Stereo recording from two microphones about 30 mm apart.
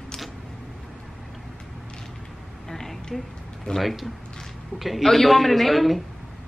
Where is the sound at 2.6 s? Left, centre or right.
Centre.